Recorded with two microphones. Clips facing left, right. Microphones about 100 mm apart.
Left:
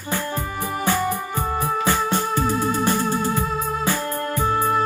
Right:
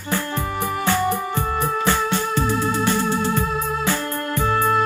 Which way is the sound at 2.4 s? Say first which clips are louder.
Even; 45° left (ahead or behind).